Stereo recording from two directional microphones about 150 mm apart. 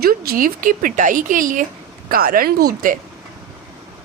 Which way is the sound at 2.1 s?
75° right (ahead or behind).